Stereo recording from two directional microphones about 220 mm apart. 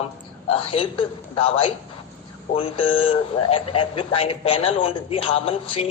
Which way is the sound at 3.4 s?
25° left (ahead or behind).